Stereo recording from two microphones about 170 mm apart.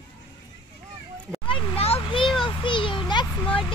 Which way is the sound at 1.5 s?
35° left (ahead or behind).